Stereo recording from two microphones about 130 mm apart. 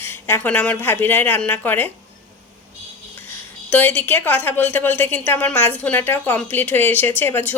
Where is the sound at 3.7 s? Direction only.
15° left (ahead or behind).